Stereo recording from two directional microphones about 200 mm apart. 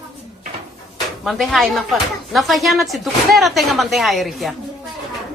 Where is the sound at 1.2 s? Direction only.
Centre (ahead or behind).